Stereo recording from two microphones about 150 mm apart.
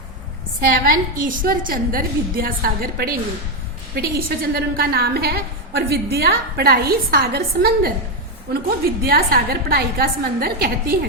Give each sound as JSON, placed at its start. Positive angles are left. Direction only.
{"t": 0.7, "sound": "a woman's voice", "side_deg": -65}
{"t": 3.9, "sound": "a woman's voice", "side_deg": -90}
{"t": 9.0, "sound": "a woman's voice", "side_deg": -80}